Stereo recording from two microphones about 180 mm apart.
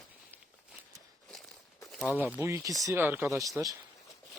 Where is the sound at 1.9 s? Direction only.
Centre (ahead or behind); by 3.8 s 20° right (ahead or behind).